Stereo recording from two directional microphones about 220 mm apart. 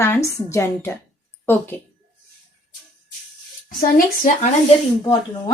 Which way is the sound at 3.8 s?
40° left (ahead or behind).